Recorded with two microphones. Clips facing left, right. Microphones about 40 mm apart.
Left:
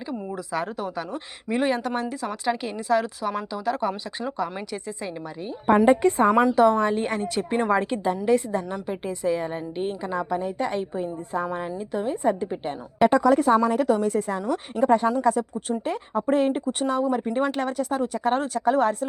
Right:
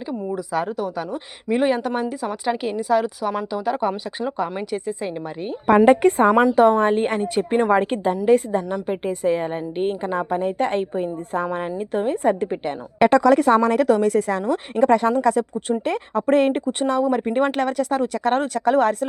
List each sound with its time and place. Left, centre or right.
0.1 s a woman's voice: centre
3.7 s a woman's voice: centre
5.6 s a woman's voice: right
6.0 s a woman's voice: right
7.2 s a woman's voice: right
13.4 s a woman's voice: right
14.8 s speech: right
16.9 s speech: right
17.2 s a woman's voice: right
17.6 s speech: right